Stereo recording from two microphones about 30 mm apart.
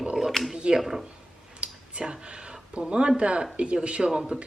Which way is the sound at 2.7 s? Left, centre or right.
Right.